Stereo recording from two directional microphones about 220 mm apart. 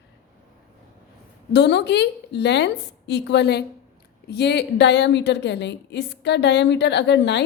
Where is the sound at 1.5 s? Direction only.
50° left (ahead or behind).